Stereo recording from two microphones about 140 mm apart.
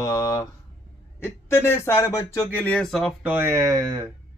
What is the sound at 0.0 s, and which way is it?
Speech, 25° left (ahead or behind).